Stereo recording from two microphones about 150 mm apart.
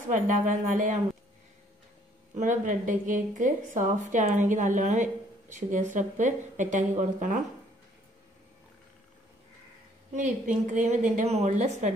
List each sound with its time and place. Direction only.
0.1 s a woman's voice: 60° right (ahead or behind)
2.3 s a woman's voice: 55° right (ahead or behind)
10.1 s a woman's voice: 55° right (ahead or behind)